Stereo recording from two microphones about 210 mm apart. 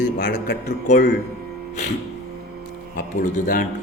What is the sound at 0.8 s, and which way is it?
Speech, 35° left (ahead or behind).